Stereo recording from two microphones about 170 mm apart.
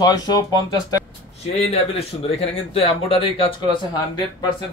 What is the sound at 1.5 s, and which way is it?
Speech, 35° left (ahead or behind).